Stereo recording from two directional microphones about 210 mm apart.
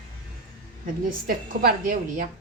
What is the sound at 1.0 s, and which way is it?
A woman's voice, 40° right (ahead or behind).